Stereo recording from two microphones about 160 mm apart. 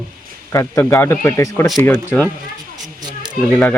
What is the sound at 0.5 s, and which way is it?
Speech, 15° left (ahead or behind).